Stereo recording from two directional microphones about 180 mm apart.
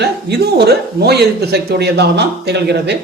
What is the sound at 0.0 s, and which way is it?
Speech, 65° right (ahead or behind).